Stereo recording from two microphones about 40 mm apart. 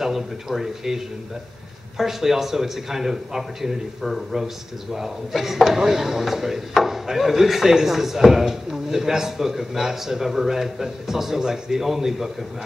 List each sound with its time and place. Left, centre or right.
0.0 s speech: centre